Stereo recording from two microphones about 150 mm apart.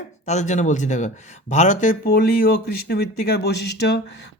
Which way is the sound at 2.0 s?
90° left.